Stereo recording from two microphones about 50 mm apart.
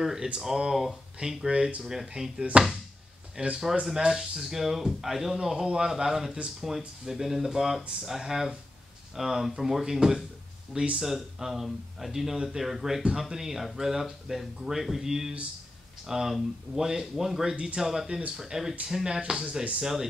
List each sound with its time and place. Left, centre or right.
0.0 s speech: centre
19.4 s speech: right
19.8 s speech: centre